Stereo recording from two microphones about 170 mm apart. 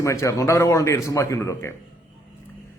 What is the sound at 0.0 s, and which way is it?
A man's voice, 15° left (ahead or behind).